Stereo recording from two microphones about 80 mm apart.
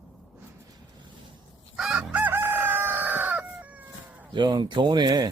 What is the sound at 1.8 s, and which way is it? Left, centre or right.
Chicken, centre.